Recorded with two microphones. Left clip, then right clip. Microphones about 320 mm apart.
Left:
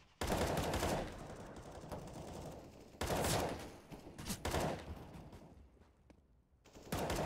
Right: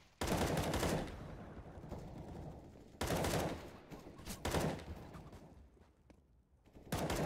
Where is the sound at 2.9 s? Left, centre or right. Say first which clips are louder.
Left 1 dB; centre.